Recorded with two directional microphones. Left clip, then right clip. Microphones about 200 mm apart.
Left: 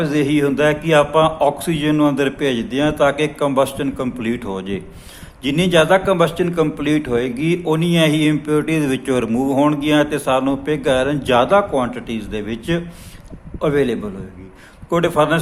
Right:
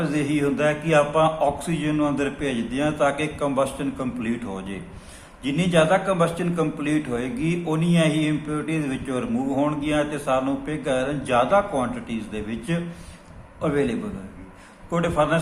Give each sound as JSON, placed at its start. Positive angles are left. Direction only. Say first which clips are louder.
{"t": 0.0, "sound": "a man's voice", "louder": "left 6 dB", "side_deg": 45}